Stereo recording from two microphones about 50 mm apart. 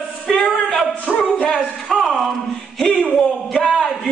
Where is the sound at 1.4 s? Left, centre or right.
Centre.